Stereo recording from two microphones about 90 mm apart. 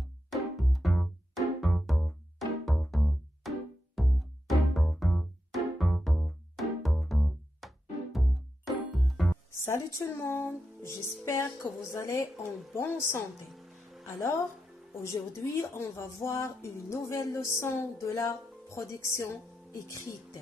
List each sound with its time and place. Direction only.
0.3 s music: centre (ahead or behind)
9.5 s music: 30° left (ahead or behind)
13.5 s music: centre (ahead or behind)
15.4 s speech: 30° left (ahead or behind)